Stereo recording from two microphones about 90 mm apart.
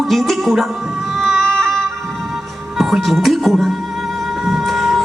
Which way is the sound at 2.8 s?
Centre (ahead or behind).